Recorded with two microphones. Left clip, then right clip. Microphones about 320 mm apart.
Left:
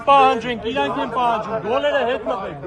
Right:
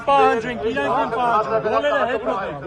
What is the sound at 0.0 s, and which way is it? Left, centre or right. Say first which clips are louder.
Speech: left 2 dB; left.